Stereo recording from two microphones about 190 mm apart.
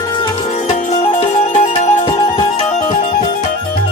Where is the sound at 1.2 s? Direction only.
35° left (ahead or behind).